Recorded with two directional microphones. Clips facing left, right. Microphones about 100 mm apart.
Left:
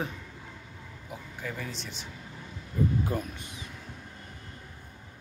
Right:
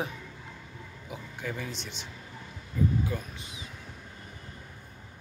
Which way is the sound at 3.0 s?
50° left (ahead or behind).